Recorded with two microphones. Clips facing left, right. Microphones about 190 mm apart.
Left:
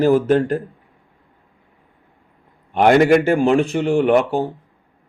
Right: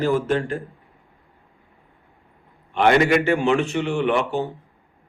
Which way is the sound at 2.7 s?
45° left (ahead or behind).